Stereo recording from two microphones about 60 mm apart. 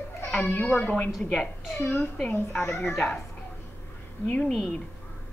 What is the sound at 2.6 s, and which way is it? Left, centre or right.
Speech, left.